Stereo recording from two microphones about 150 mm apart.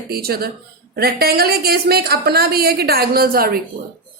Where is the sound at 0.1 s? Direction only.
90° right.